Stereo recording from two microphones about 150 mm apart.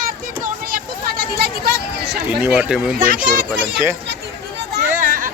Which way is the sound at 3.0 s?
65° right (ahead or behind).